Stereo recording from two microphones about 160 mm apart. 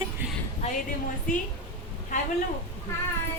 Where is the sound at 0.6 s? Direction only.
40° left (ahead or behind).